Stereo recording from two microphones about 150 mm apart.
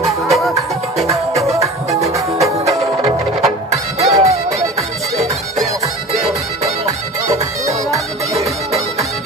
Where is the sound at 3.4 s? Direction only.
50° right (ahead or behind).